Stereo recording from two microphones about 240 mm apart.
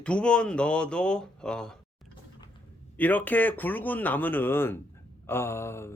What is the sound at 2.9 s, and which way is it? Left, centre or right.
Speech, centre.